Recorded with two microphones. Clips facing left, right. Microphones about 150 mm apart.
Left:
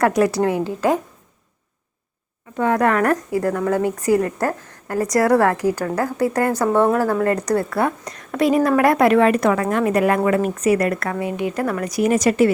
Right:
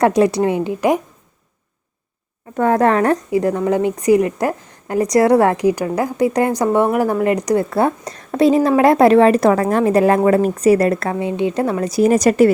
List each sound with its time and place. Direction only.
0.0 s a woman's voice: 25° right (ahead or behind)
2.7 s a woman's voice: 30° right (ahead or behind)